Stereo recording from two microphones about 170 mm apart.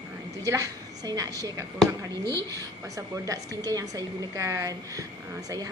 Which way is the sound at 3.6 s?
20° right (ahead or behind).